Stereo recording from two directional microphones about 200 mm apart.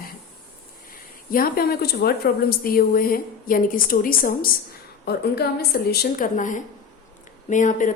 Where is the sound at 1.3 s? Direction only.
45° left (ahead or behind).